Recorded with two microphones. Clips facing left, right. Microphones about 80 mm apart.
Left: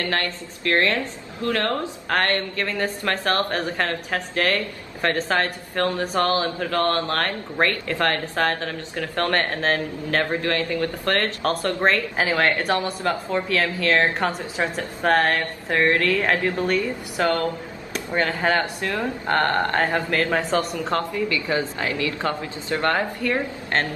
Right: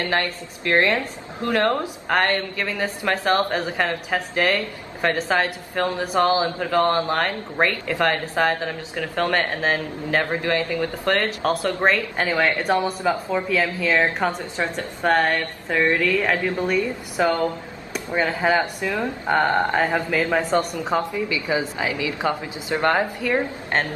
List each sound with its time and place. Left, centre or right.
0.0 s speech: right
12.2 s speech: centre